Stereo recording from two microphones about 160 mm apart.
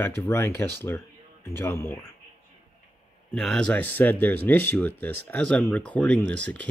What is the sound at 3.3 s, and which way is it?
Speech, 5° left (ahead or behind).